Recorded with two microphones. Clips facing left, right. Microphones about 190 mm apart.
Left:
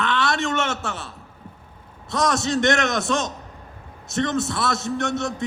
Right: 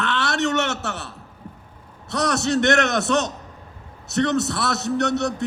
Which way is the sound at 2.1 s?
65° right (ahead or behind).